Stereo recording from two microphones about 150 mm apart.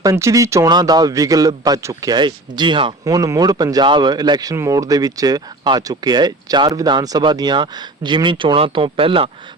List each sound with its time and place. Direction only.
0.0 s speech: 20° right (ahead or behind); by 9.3 s 35° right (ahead or behind)